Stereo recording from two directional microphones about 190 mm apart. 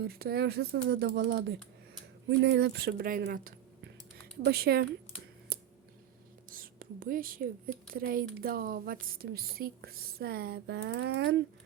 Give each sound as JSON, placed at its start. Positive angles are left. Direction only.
{"t": 0.0, "sound": "speech", "side_deg": -55}
{"t": 6.5, "sound": "whispering", "side_deg": -50}
{"t": 7.9, "sound": "a woman's voice", "side_deg": -50}